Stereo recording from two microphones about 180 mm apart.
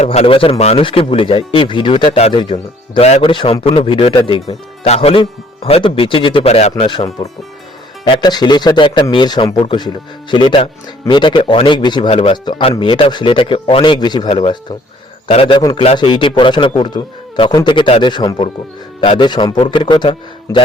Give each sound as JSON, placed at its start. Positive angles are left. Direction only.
{"t": 0.0, "sound": "speech", "side_deg": 35}